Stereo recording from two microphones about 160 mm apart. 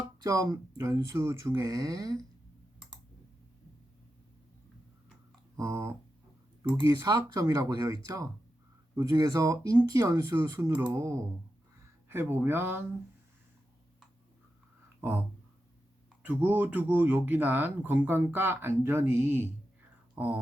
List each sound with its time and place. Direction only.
0.2 s speech: 20° right (ahead or behind)
5.5 s speech: 20° right (ahead or behind)
16.2 s speech: 10° right (ahead or behind)